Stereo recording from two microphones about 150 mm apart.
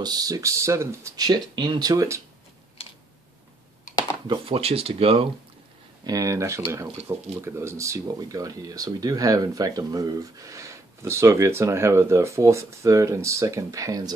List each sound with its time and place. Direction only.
0.0 s speech: 25° right (ahead or behind)
4.3 s speech: 40° right (ahead or behind)
6.0 s speech: 25° right (ahead or behind)